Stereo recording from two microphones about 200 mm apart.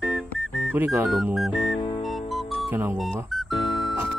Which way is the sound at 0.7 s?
10° right (ahead or behind).